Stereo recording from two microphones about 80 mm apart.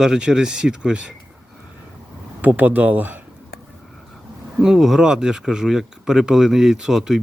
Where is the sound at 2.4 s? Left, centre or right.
Right.